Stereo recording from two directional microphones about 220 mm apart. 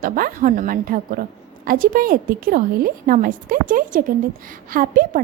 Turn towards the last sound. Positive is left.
turn(degrees=-40)  # may be behind; listen again after turning